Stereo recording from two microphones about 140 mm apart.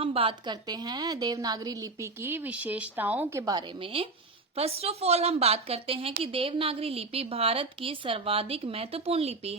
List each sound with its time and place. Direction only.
0.0 s a woman's voice: 40° right (ahead or behind)
2.2 s a woman's voice: 15° right (ahead or behind)
3.9 s a woman's voice: 40° right (ahead or behind)